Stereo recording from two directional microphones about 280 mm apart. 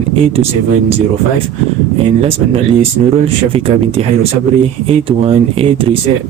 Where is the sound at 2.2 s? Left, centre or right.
Centre.